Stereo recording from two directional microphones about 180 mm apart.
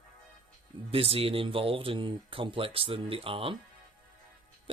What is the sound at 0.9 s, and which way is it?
Speech, 30° right (ahead or behind).